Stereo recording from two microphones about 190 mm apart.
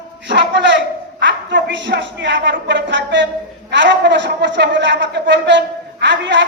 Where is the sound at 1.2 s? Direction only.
70° right (ahead or behind).